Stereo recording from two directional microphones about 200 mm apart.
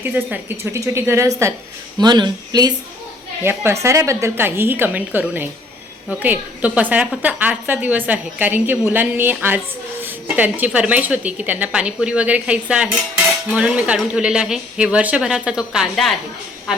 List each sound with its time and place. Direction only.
0.0 s a woman's voice: 10° right (ahead or behind)